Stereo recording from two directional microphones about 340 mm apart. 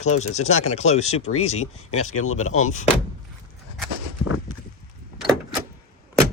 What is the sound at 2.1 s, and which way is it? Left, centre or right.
Speech, left.